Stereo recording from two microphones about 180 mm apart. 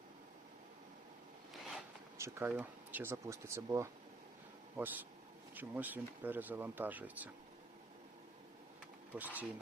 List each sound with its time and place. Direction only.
2.1 s speech: 15° right (ahead or behind)
9.1 s speech: 10° right (ahead or behind)